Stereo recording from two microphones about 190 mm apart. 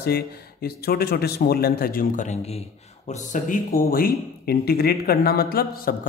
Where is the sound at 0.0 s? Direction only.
55° left (ahead or behind).